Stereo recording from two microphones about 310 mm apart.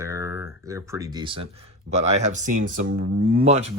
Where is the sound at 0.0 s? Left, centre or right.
Centre.